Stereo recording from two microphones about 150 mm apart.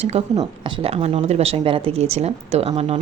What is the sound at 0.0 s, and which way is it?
Speech, 45° right (ahead or behind).